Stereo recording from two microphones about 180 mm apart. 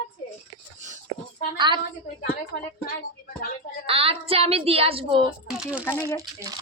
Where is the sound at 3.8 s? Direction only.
30° right (ahead or behind).